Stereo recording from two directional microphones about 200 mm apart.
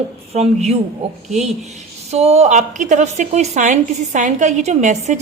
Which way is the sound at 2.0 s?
30° right (ahead or behind).